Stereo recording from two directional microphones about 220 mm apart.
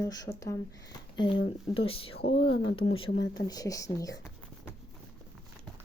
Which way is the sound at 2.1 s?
50° left (ahead or behind).